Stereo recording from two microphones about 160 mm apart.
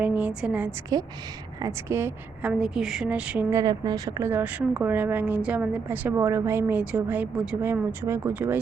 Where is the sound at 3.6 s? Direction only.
25° right (ahead or behind).